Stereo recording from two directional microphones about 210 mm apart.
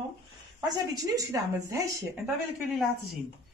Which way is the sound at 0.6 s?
15° right (ahead or behind).